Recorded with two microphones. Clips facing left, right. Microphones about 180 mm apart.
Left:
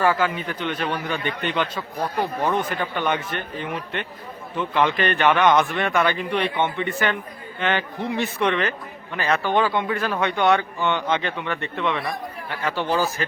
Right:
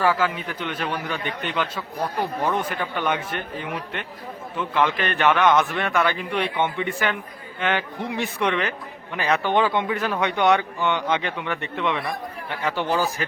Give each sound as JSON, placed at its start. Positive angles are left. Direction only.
{"t": 0.0, "sound": "a man's voice", "side_deg": -5}